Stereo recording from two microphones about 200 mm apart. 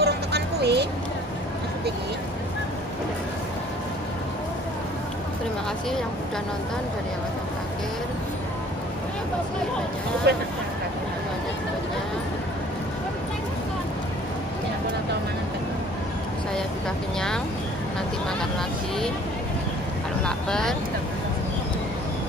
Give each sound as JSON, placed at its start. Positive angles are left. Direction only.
{"t": 0.0, "sound": "a sound", "side_deg": -55}
{"t": 10.3, "sound": "speech", "side_deg": -55}
{"t": 20.2, "sound": "speech", "side_deg": 5}